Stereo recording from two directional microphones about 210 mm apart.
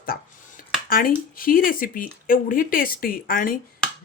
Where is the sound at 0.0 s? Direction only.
45° left (ahead or behind).